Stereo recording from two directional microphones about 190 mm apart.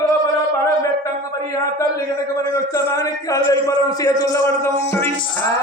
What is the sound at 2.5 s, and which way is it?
A man's voice, 15° left (ahead or behind).